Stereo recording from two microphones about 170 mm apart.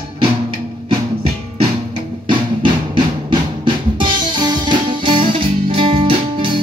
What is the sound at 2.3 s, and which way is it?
Music, 30° right (ahead or behind).